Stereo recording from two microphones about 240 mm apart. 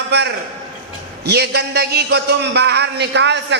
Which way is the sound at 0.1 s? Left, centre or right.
Right.